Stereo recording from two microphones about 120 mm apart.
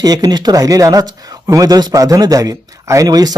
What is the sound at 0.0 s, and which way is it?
Speech, 30° right (ahead or behind).